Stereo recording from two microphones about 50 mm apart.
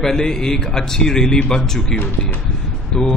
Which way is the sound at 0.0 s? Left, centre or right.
Centre.